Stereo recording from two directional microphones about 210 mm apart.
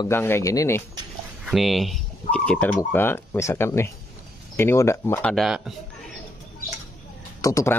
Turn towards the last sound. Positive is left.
turn(degrees=15)  # may be behind; listen again after turning